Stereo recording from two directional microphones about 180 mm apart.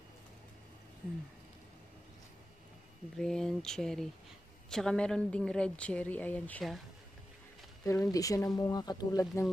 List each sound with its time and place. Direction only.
3.2 s speech: 5° left (ahead or behind)
7.8 s speech: 15° left (ahead or behind)